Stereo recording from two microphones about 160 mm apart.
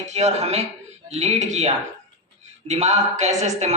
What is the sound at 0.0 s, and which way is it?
A man's voice, 45° right (ahead or behind).